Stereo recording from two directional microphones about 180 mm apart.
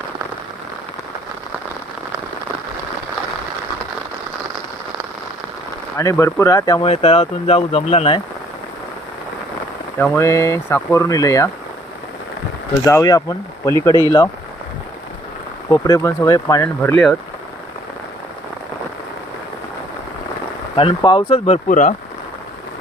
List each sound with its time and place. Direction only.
6.0 s speech: 15° left (ahead or behind)
6.8 s speech: 35° left (ahead or behind)
10.0 s speech: 15° left (ahead or behind)
12.8 s speech: 20° left (ahead or behind)
15.7 s speech: 20° left (ahead or behind)
20.7 s speech: 30° left (ahead or behind); by 21.9 s 45° left (ahead or behind)